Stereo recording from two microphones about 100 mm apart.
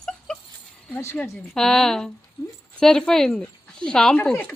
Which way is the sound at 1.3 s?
5° left (ahead or behind).